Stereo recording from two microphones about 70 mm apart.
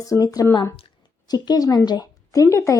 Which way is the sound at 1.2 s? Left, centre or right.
Left.